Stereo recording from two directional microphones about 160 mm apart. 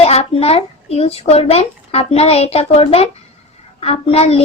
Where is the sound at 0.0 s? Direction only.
40° left (ahead or behind).